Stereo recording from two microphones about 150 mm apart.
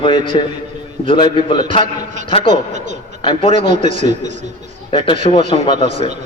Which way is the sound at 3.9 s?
55° right (ahead or behind).